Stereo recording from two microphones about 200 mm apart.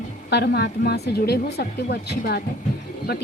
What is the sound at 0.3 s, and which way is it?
A woman's voice, 55° left (ahead or behind).